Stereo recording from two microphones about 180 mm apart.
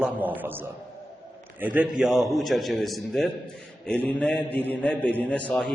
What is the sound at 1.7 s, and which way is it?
A man's voice, 5° right (ahead or behind).